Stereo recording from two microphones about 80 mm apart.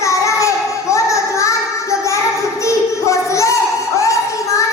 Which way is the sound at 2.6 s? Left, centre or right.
Left.